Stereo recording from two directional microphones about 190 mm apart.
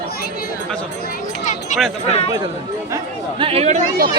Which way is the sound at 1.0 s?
45° left (ahead or behind).